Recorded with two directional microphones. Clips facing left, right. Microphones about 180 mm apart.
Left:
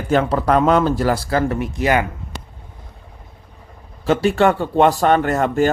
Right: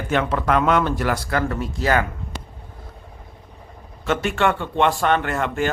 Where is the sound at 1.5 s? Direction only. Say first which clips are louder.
Left 3 dB; 20° left (ahead or behind).